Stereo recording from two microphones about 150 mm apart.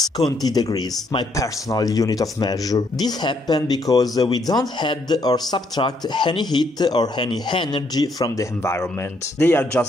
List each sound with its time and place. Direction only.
0.4 s speech: 25° left (ahead or behind)